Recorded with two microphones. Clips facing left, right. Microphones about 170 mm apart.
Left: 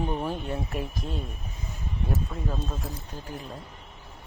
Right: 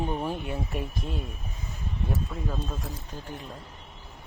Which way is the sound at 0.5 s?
Centre (ahead or behind).